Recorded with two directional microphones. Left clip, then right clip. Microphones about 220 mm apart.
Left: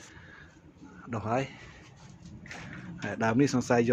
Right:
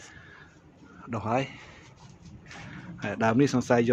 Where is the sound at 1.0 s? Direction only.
10° right (ahead or behind).